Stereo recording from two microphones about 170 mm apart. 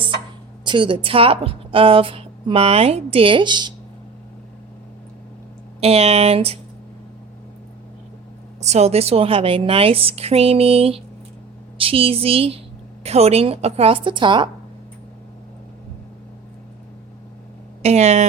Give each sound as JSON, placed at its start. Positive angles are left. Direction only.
{"t": 0.6, "sound": "a woman's voice", "side_deg": -30}
{"t": 5.8, "sound": "a woman's voice", "side_deg": -35}
{"t": 8.6, "sound": "a woman's voice", "side_deg": -40}
{"t": 17.8, "sound": "a woman's voice", "side_deg": -40}